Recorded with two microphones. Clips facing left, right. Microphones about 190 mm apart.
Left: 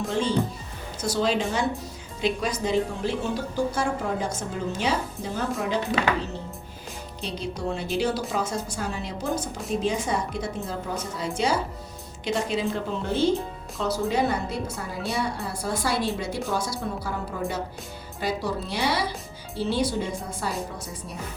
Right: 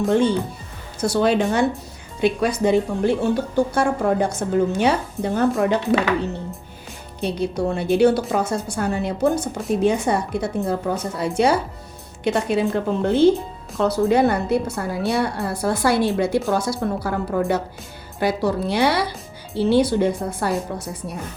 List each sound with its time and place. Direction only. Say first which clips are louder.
0.1 s a woman's voice: right 5 dB; 60° right (ahead or behind)
7.2 s a woman's voice: right 9 dB; 60° right (ahead or behind)